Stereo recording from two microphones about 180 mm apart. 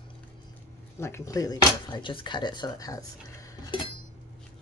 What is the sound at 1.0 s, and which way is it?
Speech, 15° left (ahead or behind).